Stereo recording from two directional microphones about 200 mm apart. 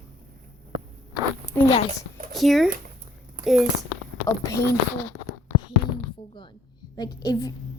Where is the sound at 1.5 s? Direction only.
15° left (ahead or behind).